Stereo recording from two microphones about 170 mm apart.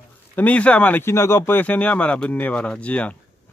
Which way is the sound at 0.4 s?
10° left (ahead or behind).